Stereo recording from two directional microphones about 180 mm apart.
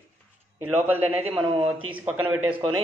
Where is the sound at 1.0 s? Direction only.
35° right (ahead or behind).